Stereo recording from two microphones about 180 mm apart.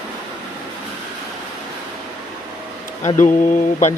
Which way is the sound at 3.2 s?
45° left (ahead or behind).